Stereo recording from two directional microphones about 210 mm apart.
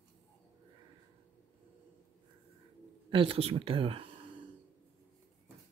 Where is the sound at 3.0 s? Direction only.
25° right (ahead or behind).